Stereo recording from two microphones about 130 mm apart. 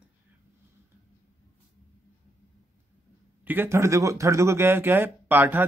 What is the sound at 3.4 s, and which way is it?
Speech, 20° right (ahead or behind).